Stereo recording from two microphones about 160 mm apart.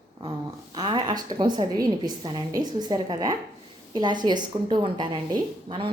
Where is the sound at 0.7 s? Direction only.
30° right (ahead or behind).